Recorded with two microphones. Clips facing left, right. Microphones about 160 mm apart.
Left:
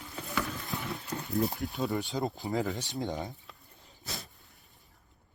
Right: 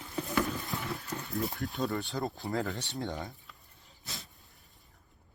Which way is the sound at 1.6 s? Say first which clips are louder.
Even; centre (ahead or behind).